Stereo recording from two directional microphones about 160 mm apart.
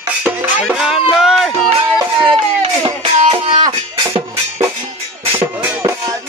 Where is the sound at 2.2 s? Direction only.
35° right (ahead or behind).